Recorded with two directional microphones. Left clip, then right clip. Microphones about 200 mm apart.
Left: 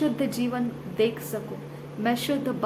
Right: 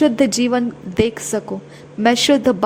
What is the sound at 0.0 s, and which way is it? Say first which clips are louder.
A woman's voice: right 11 dB; 40° right (ahead or behind).